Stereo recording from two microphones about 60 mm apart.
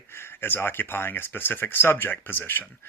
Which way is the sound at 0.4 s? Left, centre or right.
Left.